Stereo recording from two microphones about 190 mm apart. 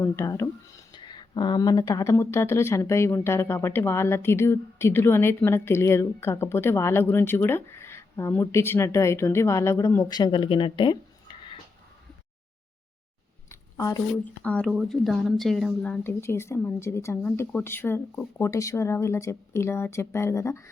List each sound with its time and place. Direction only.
0.0 s speech: 15° left (ahead or behind)
13.5 s a sound: 15° left (ahead or behind)
14.4 s speech: 5° left (ahead or behind)